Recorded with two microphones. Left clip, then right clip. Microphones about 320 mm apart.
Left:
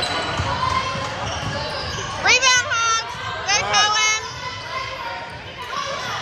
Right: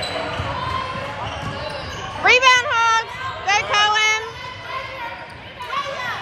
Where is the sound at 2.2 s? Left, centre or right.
Right.